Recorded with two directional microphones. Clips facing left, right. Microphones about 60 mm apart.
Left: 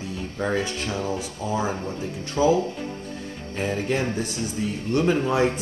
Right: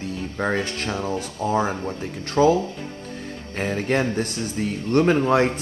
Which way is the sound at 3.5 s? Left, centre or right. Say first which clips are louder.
Right 2 dB; right.